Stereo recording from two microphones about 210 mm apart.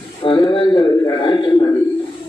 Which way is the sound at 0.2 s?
25° left (ahead or behind).